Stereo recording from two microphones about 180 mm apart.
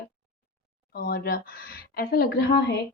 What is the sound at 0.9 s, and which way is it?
A woman's voice, 55° left (ahead or behind).